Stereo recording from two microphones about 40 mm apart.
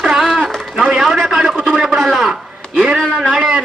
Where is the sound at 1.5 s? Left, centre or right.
Centre.